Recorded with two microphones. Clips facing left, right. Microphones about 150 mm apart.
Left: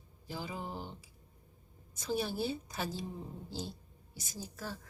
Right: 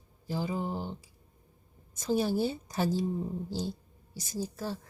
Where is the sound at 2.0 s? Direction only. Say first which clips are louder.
Right 7 dB; 40° right (ahead or behind).